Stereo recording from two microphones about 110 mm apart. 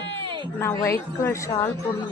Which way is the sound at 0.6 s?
25° left (ahead or behind).